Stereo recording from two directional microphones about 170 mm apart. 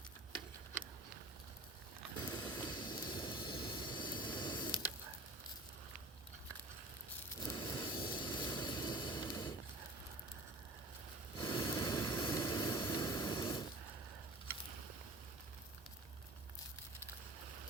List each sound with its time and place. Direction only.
2.3 s vehicle: 25° left (ahead or behind)
7.4 s a sound: 25° left (ahead or behind)
11.3 s vehicle: 30° left (ahead or behind)
13.0 s jet engine: 30° left (ahead or behind)